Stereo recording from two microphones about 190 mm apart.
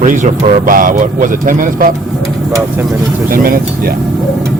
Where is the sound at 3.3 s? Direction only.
50° right (ahead or behind).